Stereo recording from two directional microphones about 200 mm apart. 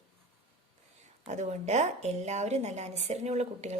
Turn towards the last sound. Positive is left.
turn(degrees=-35)  # may be behind; listen again after turning